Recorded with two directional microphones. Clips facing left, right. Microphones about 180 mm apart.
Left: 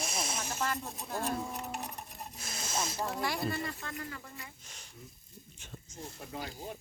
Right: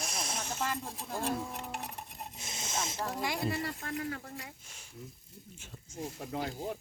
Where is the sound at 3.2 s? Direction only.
20° right (ahead or behind).